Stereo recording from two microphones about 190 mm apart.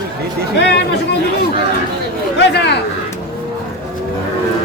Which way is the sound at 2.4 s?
60° left (ahead or behind).